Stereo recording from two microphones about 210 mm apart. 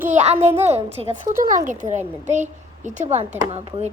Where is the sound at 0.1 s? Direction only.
30° right (ahead or behind).